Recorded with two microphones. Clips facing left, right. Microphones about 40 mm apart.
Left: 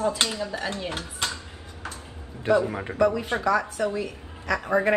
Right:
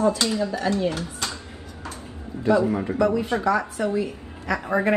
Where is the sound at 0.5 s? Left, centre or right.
Left.